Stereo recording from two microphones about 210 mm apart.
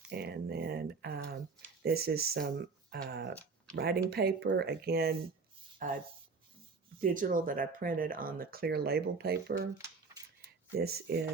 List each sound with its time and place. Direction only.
0.1 s speech: 50° right (ahead or behind)
2.9 s a sound: 50° right (ahead or behind)
3.8 s speech: 50° right (ahead or behind)
7.0 s speech: 40° right (ahead or behind)
10.8 s speech: 50° right (ahead or behind)